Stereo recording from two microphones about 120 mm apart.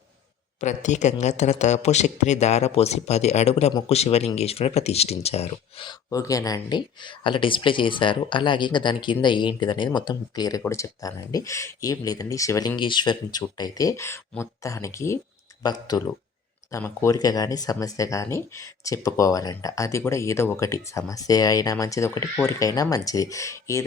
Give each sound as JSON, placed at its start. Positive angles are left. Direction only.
{"t": 0.6, "sound": "speech", "side_deg": 85}
{"t": 6.1, "sound": "speech", "side_deg": 30}
{"t": 16.7, "sound": "speech", "side_deg": 20}
{"t": 17.2, "sound": "speech", "side_deg": 30}